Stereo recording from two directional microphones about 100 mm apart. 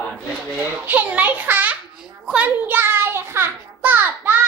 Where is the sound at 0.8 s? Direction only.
20° right (ahead or behind).